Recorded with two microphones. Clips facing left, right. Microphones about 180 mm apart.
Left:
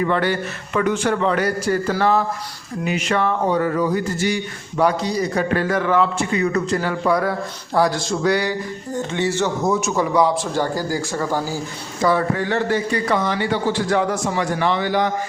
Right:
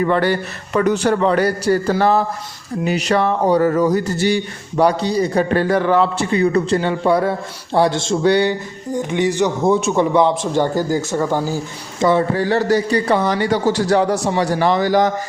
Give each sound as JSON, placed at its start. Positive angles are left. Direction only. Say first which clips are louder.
{"t": 0.0, "sound": "a man's voice", "louder": "right 3 dB", "side_deg": -35}
{"t": 8.9, "sound": "speech", "louder": "right 4 dB", "side_deg": -15}
{"t": 9.6, "sound": "a man's voice", "louder": "right 6 dB", "side_deg": -25}